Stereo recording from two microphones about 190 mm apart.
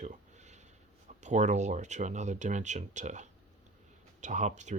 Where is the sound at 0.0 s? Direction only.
40° right (ahead or behind).